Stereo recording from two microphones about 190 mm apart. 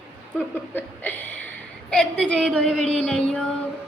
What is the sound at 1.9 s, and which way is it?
A woman's voice, 5° left (ahead or behind).